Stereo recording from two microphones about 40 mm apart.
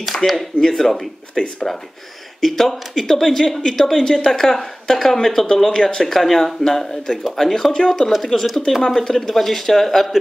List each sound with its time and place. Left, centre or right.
0.1 s speech: left
0.7 s speech: centre
2.4 s speech: centre
5.7 s speech: centre
5.9 s speech: centre
7.7 s speech: centre
8.1 s speech: centre